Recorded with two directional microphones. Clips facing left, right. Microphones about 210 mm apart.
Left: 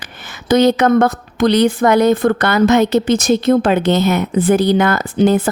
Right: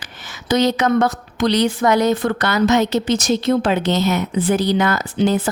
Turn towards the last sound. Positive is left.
turn(degrees=55)  # may be behind; listen again after turning